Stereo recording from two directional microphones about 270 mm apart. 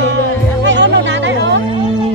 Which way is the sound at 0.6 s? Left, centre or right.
Right.